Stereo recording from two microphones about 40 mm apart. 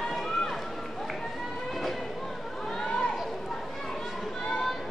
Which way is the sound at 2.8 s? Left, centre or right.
Left.